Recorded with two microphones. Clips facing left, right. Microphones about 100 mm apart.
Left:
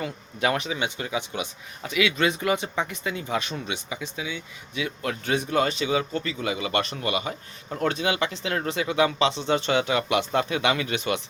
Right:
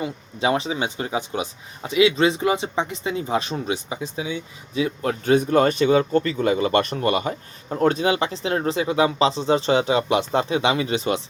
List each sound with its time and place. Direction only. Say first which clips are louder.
0.0 s speech: right 3 dB; 25° right (ahead or behind)